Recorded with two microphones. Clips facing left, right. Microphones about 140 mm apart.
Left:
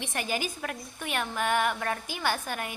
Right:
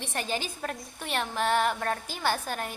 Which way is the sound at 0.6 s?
35° right (ahead or behind).